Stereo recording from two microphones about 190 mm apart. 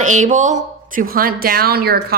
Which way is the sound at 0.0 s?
40° right (ahead or behind).